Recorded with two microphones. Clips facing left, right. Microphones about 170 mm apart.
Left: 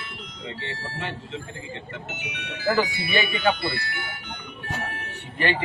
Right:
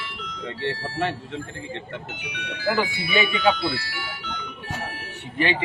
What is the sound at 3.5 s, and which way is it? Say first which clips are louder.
Speech: right 2 dB; 55° left (ahead or behind).